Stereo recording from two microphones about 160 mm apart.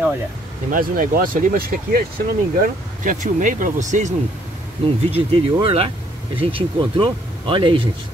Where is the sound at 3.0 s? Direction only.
55° right (ahead or behind).